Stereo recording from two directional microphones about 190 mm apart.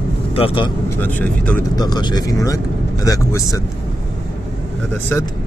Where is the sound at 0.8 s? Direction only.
10° left (ahead or behind).